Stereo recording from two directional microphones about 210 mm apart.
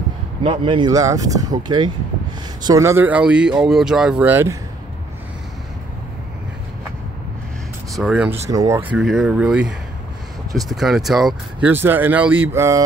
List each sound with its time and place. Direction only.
0.4 s speech: 25° right (ahead or behind)
7.9 s speech: 5° right (ahead or behind)
8.5 s speech: 15° right (ahead or behind)